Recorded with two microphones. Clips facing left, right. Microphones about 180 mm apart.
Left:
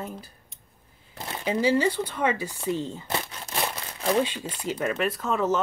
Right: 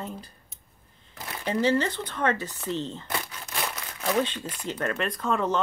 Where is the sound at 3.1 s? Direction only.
30° left (ahead or behind).